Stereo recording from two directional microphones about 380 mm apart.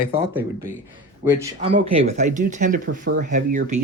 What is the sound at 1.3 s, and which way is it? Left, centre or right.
Speech, centre.